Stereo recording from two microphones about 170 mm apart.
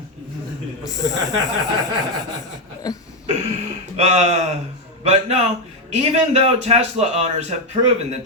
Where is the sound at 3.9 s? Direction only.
40° right (ahead or behind).